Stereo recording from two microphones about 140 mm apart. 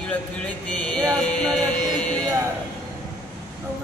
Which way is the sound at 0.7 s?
5° left (ahead or behind).